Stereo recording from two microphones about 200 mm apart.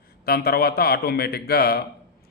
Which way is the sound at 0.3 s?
50° left (ahead or behind).